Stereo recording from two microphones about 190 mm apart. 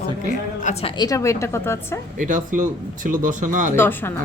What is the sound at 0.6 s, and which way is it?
A woman's voice, 35° left (ahead or behind).